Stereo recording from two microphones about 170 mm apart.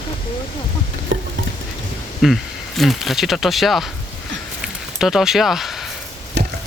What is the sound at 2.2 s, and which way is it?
Speech, centre (ahead or behind).